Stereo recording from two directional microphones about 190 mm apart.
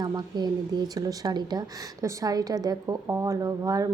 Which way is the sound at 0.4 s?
20° right (ahead or behind).